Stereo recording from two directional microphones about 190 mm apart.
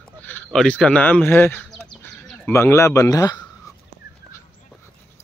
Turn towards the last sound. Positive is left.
turn(degrees=20)  # may be behind; listen again after turning